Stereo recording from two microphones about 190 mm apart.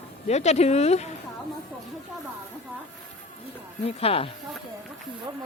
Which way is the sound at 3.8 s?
30° left (ahead or behind).